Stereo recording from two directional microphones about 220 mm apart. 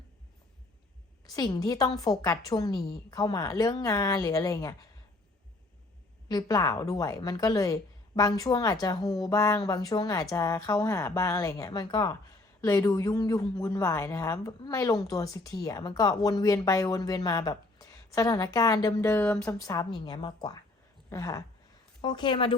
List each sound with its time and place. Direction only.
1.3 s a woman's voice: 15° left (ahead or behind)
6.2 s a woman's voice: 15° left (ahead or behind)
19.5 s a woman's voice: 15° left (ahead or behind)